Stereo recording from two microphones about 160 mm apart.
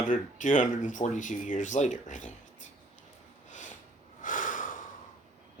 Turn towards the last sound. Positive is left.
turn(degrees=55)  # may be behind; listen again after turning